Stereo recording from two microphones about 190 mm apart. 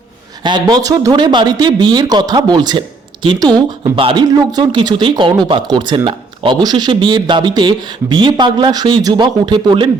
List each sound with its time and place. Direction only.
0.4 s a man's voice: 20° right (ahead or behind)